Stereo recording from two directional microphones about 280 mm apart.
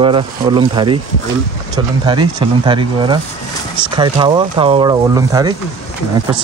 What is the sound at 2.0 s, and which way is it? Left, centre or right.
Speech, centre.